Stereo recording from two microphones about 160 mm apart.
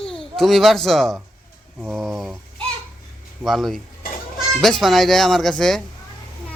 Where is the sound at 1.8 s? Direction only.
5° right (ahead or behind).